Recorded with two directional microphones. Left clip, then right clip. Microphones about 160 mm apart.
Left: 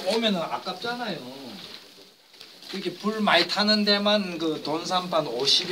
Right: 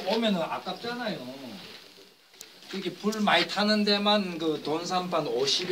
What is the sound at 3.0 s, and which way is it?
A man's voice, 10° left (ahead or behind).